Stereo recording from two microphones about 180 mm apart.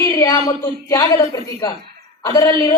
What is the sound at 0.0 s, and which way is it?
A woman's voice, 15° left (ahead or behind).